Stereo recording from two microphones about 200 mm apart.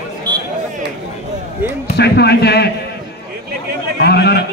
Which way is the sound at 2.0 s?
55° left (ahead or behind).